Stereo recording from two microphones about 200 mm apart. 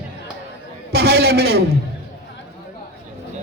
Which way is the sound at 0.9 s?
55° right (ahead or behind).